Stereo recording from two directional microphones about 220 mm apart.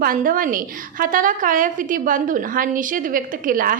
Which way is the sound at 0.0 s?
40° right (ahead or behind).